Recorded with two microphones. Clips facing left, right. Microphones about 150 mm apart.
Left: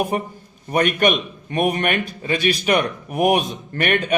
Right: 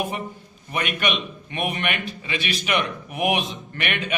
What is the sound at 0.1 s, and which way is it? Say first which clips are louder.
Speech: left 7 dB; 45° left (ahead or behind).